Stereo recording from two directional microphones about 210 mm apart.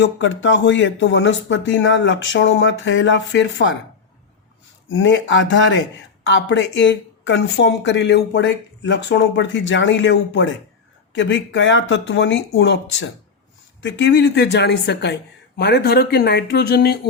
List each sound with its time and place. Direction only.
0.0 s speech: 60° left (ahead or behind)
4.9 s a woman's voice: 65° left (ahead or behind)